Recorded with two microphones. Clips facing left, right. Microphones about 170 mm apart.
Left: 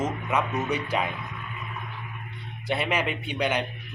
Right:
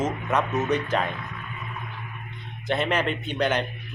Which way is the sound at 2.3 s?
10° left (ahead or behind).